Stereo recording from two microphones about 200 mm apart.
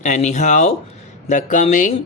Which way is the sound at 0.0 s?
35° left (ahead or behind).